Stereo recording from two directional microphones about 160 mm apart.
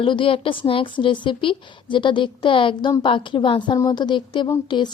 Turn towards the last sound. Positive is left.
turn(degrees=30)  # may be behind; listen again after turning